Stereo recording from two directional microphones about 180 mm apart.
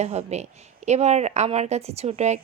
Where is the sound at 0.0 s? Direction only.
35° right (ahead or behind).